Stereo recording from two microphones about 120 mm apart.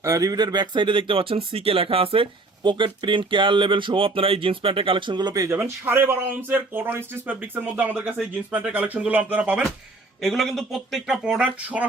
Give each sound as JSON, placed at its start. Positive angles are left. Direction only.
{"t": 0.0, "sound": "speech", "side_deg": -30}
{"t": 5.6, "sound": "speech", "side_deg": -20}